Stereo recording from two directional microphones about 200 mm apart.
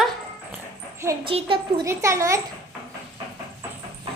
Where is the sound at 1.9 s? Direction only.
15° right (ahead or behind).